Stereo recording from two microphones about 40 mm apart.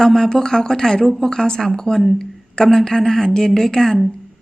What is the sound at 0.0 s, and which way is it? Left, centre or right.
Speech, centre.